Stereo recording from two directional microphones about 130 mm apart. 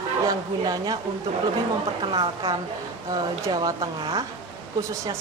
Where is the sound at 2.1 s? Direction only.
40° right (ahead or behind).